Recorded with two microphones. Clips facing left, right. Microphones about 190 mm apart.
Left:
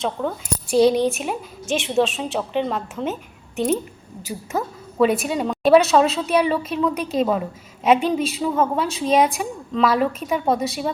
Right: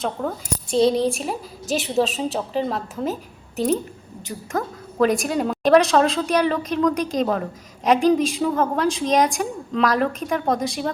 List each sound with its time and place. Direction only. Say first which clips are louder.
0.0 s a woman's voice: left 1 dB; centre (ahead or behind)
0.8 s speech: left 2 dB; 30° right (ahead or behind)
1.7 s a woman's voice: left 1 dB; centre (ahead or behind)
4.2 s a woman's voice: left 1 dB; 5° left (ahead or behind)